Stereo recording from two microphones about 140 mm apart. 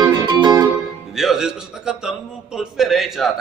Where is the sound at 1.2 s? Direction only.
5° right (ahead or behind).